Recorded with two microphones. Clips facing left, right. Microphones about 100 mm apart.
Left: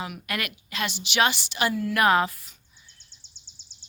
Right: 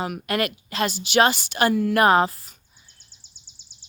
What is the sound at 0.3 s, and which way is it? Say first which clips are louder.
Speech: right 8 dB; 35° right (ahead or behind).